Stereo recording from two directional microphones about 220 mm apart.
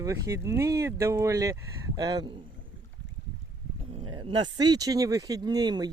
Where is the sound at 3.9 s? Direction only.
25° right (ahead or behind).